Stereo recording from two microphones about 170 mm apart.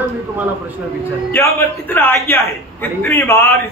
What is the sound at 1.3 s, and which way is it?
A man's voice, 15° left (ahead or behind).